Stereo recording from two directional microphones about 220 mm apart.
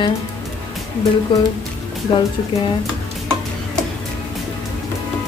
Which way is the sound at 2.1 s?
20° left (ahead or behind).